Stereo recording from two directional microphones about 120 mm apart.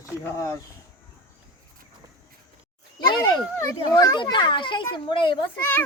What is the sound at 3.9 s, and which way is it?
A child's voice, 35° left (ahead or behind).